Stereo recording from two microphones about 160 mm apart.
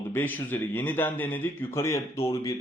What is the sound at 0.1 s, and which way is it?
Speech, 10° left (ahead or behind).